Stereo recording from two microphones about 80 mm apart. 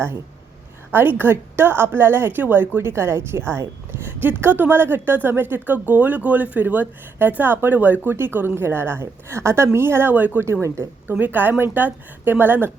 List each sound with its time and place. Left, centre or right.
0.9 s a woman's voice: right
10.4 s speech: right
11.1 s a woman's voice: right